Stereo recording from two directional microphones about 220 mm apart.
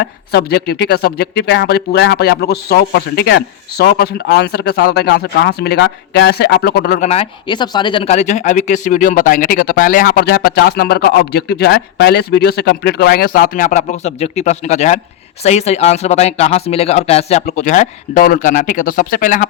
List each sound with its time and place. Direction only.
0.0 s speech: 50° left (ahead or behind)